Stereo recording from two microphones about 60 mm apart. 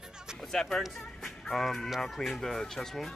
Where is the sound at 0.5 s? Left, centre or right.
Centre.